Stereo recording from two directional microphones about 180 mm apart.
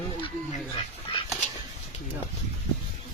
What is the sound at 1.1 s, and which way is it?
Duck, 30° left (ahead or behind).